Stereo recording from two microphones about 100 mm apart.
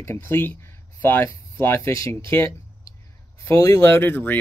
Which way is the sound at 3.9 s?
20° left (ahead or behind).